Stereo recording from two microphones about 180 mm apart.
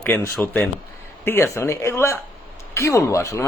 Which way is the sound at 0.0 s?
10° left (ahead or behind).